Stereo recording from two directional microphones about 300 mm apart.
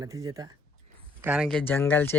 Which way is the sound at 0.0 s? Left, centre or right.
Centre.